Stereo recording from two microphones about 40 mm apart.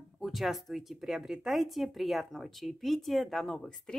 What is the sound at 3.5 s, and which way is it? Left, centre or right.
Speech, centre.